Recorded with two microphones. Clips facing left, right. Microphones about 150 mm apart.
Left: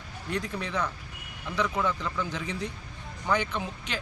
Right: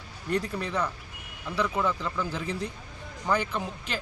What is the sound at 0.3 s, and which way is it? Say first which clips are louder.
Speech: right 2 dB; 5° right (ahead or behind).